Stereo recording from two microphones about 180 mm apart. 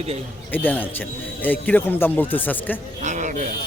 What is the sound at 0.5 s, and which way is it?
Speech, 10° left (ahead or behind).